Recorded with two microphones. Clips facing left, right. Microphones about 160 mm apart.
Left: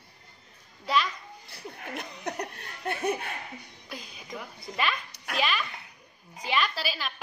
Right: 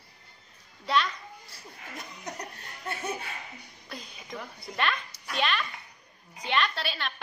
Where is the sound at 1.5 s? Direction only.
65° left (ahead or behind).